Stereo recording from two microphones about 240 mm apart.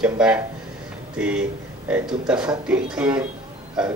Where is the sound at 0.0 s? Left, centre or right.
Centre.